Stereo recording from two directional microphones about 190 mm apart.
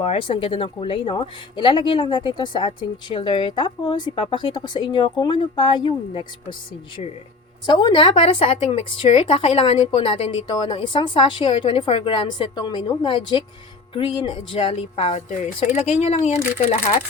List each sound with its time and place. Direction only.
0.0 s speech: 30° left (ahead or behind)